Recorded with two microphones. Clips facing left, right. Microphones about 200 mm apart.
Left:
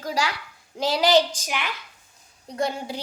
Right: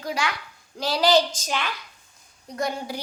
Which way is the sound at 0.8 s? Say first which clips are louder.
Left 1 dB; 20° left (ahead or behind).